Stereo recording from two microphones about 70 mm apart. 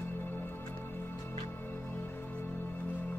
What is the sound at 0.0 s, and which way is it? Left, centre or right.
Music, left.